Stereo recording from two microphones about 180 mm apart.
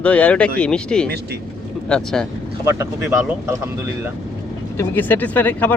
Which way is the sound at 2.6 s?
15° right (ahead or behind).